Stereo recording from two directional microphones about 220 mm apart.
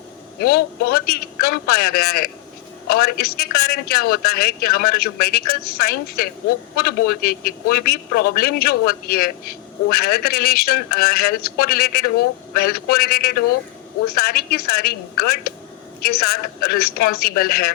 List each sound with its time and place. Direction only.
0.3 s a man's voice: 45° left (ahead or behind)